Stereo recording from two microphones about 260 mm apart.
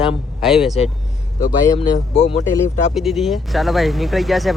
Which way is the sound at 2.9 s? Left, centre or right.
Centre.